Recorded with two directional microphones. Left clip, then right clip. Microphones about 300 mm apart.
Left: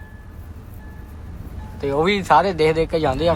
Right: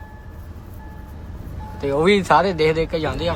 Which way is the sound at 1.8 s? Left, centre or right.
Centre.